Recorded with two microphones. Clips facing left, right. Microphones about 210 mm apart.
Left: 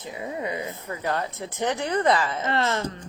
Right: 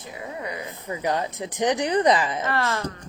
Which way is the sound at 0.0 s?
20° left (ahead or behind).